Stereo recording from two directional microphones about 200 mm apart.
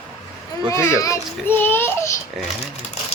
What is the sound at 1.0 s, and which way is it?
Child singing, 15° left (ahead or behind).